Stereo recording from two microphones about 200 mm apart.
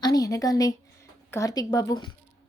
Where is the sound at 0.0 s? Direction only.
15° left (ahead or behind).